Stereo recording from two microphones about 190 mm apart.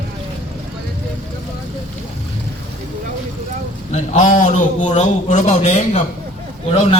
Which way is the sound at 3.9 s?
40° left (ahead or behind).